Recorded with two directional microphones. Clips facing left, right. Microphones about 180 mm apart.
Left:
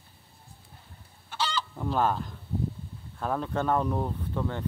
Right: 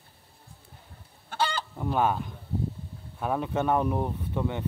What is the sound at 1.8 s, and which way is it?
Speech, 10° right (ahead or behind).